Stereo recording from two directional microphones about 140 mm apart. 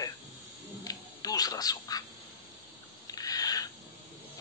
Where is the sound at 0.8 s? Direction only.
25° left (ahead or behind).